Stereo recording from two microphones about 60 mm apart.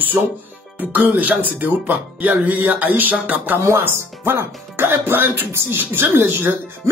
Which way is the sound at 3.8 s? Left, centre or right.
Right.